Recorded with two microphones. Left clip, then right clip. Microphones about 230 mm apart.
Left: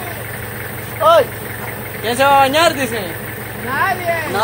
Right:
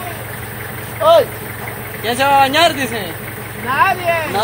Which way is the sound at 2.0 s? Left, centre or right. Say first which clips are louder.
Left 1 dB; right.